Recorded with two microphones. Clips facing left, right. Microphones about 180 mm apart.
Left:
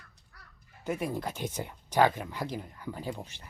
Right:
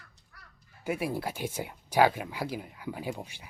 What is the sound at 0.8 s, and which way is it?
Speech, 10° right (ahead or behind).